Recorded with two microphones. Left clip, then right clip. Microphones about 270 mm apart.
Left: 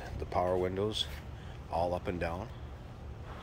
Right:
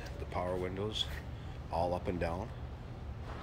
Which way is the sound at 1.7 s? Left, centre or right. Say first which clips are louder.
Left 2 dB; centre.